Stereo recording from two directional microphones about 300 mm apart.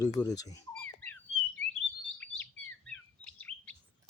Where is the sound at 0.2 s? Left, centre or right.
Centre.